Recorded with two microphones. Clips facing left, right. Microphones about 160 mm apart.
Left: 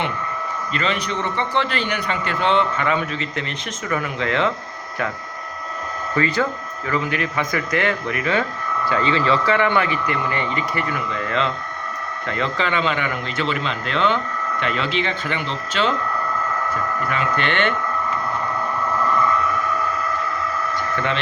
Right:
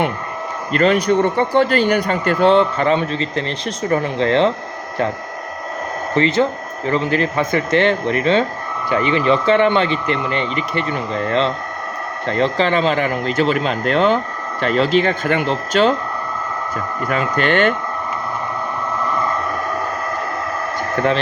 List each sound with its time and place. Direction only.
0.7 s speech: 45° right (ahead or behind)
6.1 s speech: 25° right (ahead or behind); by 16.0 s 40° right (ahead or behind)
17.3 s speech: 40° right (ahead or behind)
19.1 s a sound: 30° right (ahead or behind)